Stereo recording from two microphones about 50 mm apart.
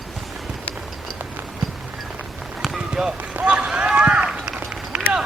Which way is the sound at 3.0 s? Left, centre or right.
Centre.